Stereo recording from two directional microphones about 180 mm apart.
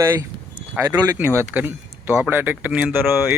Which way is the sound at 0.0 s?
20° right (ahead or behind).